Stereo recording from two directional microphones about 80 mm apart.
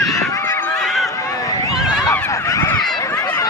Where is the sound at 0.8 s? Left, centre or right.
Centre.